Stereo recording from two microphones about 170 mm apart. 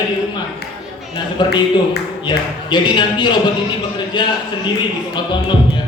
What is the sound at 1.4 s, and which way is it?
Speech, 25° left (ahead or behind).